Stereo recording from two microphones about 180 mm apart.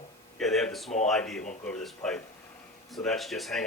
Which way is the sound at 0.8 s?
40° left (ahead or behind).